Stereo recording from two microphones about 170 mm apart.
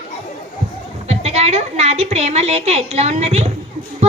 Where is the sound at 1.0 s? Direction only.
40° right (ahead or behind).